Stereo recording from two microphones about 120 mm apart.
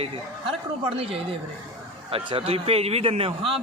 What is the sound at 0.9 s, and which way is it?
Speech, 55° right (ahead or behind).